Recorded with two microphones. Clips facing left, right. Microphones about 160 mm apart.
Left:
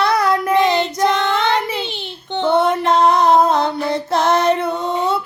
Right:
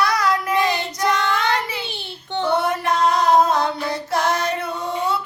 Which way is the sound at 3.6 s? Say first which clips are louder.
Left 4 dB; 25° left (ahead or behind).